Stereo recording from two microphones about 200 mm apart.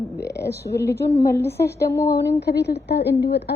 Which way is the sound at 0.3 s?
15° left (ahead or behind).